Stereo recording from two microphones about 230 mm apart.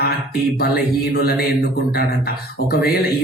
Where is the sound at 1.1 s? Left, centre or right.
Left.